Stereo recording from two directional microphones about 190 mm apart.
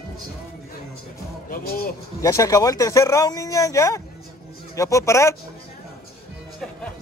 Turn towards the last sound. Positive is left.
turn(degrees=15)  # may be behind; listen again after turning